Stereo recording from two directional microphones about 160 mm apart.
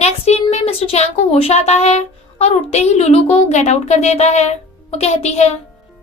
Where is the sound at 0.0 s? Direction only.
40° left (ahead or behind).